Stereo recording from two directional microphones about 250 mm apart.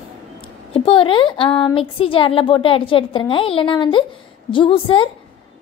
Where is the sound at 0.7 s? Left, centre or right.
Left.